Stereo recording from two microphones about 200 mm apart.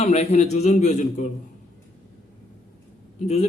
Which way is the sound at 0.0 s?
35° left (ahead or behind).